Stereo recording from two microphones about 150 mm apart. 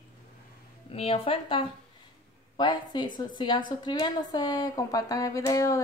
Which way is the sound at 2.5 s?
30° left (ahead or behind).